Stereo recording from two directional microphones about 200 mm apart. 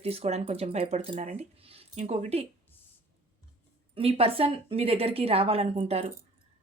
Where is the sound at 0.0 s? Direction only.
30° right (ahead or behind).